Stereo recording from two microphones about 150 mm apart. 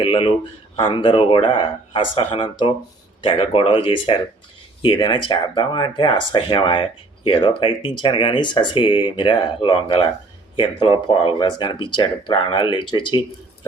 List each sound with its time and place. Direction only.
0.0 s speech: 35° left (ahead or behind)